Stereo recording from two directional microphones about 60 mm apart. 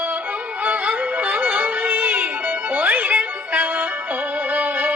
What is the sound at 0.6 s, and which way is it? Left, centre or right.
Music, right.